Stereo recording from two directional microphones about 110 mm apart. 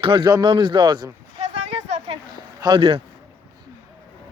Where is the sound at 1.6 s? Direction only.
85° right.